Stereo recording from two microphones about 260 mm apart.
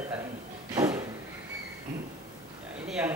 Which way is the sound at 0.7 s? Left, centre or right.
Centre.